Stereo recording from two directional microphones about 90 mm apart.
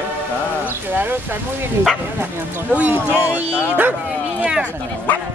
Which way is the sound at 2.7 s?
20° right (ahead or behind).